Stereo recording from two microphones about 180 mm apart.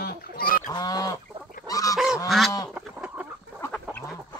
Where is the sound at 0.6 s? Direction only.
20° left (ahead or behind).